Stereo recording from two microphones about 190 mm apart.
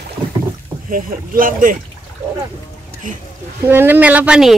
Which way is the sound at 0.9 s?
45° right (ahead or behind).